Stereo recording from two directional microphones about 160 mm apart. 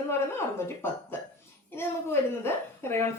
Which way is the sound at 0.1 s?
15° left (ahead or behind).